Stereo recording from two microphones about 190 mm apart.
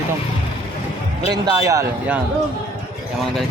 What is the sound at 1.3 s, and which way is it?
Speech, 20° right (ahead or behind).